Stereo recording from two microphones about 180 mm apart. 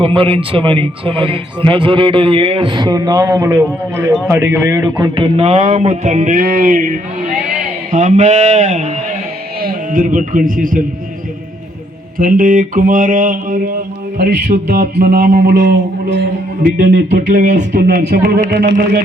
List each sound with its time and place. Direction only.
0.0 s speech: 30° right (ahead or behind)
9.6 s speech: 50° right (ahead or behind)
12.1 s mantra: 50° right (ahead or behind)
14.4 s mantra: 45° right (ahead or behind)
15.4 s mantra: 50° right (ahead or behind)
18.3 s speech: 40° right (ahead or behind)